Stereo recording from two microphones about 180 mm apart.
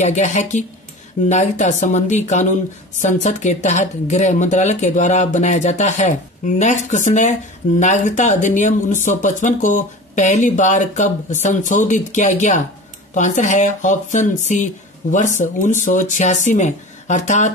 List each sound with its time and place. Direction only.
0.0 s speech: 40° left (ahead or behind)